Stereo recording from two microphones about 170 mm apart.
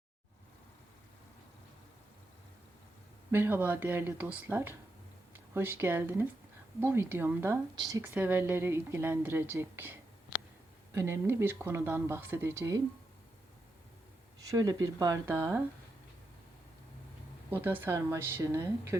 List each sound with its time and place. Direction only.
3.3 s speech: 10° right (ahead or behind)
14.4 s speech: 20° right (ahead or behind)
17.6 s speech: 10° right (ahead or behind)